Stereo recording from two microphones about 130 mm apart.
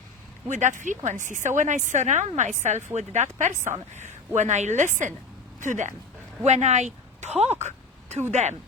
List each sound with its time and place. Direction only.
0.4 s a woman's voice: 70° right (ahead or behind)
6.4 s speech: 60° right (ahead or behind)